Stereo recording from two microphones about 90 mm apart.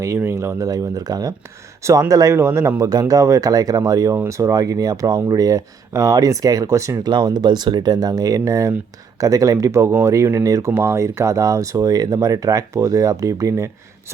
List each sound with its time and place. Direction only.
0.2 s speech: 30° right (ahead or behind)
0.7 s speech: 45° right (ahead or behind)
2.9 s speech: 45° right (ahead or behind)
7.0 s speech: 55° right (ahead or behind); by 13.7 s 35° right (ahead or behind)